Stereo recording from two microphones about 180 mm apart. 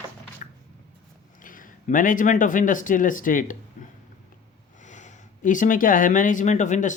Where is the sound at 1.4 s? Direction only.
50° left (ahead or behind).